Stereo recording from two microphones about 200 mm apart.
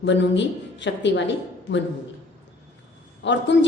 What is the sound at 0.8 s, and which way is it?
Speech, 65° left (ahead or behind).